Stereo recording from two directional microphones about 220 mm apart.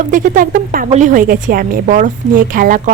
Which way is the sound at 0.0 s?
35° right (ahead or behind).